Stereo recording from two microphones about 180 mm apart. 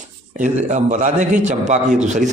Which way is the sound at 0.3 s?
45° right (ahead or behind).